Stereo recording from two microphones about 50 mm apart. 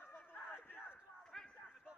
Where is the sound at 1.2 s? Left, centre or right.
Centre.